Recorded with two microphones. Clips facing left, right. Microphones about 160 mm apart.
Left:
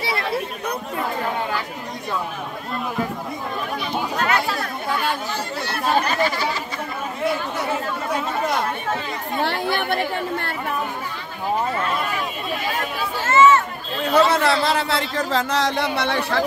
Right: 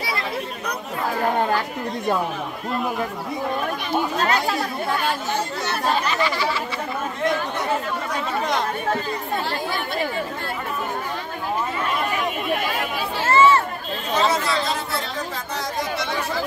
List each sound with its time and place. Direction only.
4.2 s speech: 35° right (ahead or behind)
5.9 s speech: 45° left (ahead or behind)
9.4 s speech: 65° left (ahead or behind)
13.3 s chatter: 35° right (ahead or behind)
14.1 s a sound: 60° left (ahead or behind)